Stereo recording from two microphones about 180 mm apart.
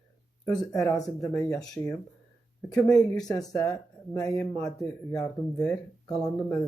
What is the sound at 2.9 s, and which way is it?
Speech, 5° left (ahead or behind).